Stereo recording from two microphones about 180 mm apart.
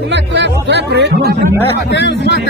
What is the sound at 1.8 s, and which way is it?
Speech, 75° left (ahead or behind).